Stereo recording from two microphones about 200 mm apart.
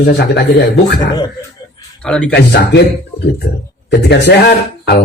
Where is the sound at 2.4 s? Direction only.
60° left (ahead or behind).